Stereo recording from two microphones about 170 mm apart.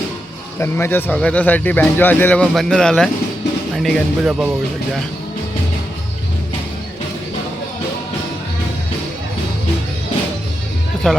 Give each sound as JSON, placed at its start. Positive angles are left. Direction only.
{"t": 0.6, "sound": "speech", "side_deg": 15}
{"t": 11.1, "sound": "speech", "side_deg": 5}